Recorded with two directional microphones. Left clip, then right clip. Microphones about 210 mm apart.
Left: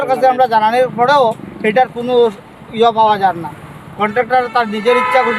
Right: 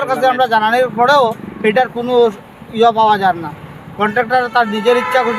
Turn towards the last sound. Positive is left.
turn(degrees=5)  # may be behind; listen again after turning